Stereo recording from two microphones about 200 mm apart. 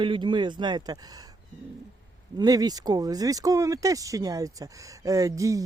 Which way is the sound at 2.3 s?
20° right (ahead or behind).